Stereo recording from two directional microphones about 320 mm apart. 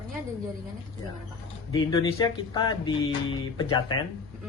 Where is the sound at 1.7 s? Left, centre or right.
Centre.